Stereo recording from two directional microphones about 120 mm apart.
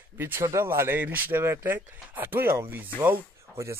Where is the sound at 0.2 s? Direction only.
20° right (ahead or behind).